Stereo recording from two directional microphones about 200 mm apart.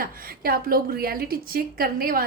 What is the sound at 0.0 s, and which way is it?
A woman's voice, 45° right (ahead or behind).